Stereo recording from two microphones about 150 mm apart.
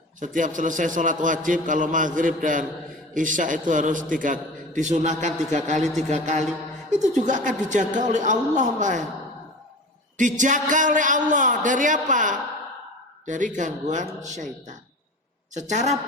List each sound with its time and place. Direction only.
0.2 s a man's voice: 60° right (ahead or behind)
10.2 s a man's voice: 55° right (ahead or behind)